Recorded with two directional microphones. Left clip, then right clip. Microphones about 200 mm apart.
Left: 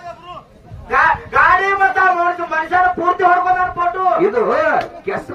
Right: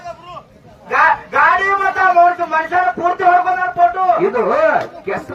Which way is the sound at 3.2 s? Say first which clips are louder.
Right 2 dB; 50° left (ahead or behind).